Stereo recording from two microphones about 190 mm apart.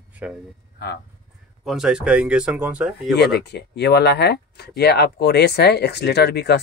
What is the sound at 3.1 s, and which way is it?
Speech, 60° left (ahead or behind).